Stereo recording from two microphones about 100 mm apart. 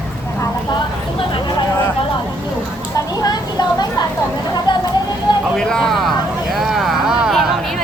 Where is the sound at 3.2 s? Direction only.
40° left (ahead or behind).